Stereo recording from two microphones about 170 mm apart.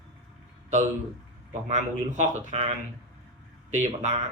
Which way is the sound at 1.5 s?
45° right (ahead or behind).